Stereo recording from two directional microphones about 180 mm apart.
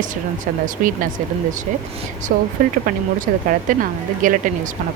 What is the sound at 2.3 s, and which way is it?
Speech, 45° right (ahead or behind).